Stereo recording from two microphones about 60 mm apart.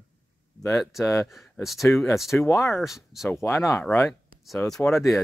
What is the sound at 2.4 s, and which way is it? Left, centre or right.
Speech, left.